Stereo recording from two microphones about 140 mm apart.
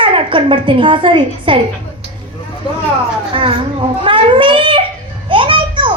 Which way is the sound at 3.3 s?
40° right (ahead or behind).